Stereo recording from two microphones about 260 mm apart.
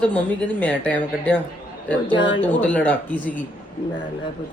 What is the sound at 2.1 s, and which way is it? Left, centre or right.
Speech, centre.